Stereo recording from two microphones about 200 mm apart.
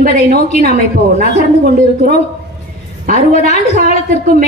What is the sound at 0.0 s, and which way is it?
Speech, 50° right (ahead or behind).